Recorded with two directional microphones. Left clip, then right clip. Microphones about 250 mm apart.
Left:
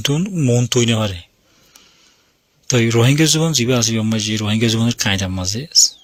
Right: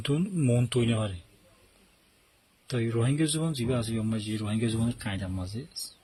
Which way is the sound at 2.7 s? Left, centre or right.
Left.